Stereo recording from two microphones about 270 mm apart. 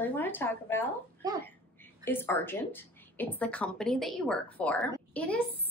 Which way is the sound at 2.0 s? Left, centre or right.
Centre.